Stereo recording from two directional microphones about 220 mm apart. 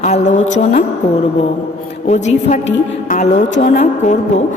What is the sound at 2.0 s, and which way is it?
A woman's voice, 30° left (ahead or behind).